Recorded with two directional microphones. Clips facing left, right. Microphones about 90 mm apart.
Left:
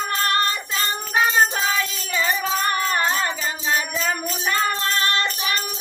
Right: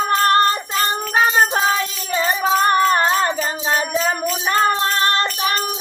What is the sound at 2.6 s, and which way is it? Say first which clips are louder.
Music: right 7 dB; 35° right (ahead or behind).